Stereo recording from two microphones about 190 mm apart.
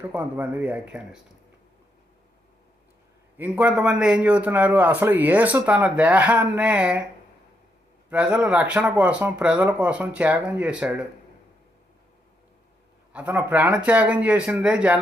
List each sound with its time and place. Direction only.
0.0 s a man's voice: 10° right (ahead or behind)
3.3 s a man's voice: 10° right (ahead or behind)
8.1 s a man's voice: 5° right (ahead or behind)
13.1 s a man's voice: 10° right (ahead or behind)